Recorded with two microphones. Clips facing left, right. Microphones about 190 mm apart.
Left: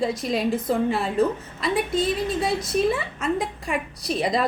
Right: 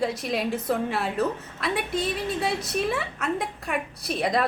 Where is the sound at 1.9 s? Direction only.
30° left (ahead or behind).